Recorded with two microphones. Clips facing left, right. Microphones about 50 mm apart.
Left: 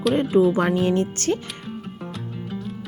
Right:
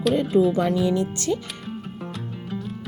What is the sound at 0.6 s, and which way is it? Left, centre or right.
Speech, left.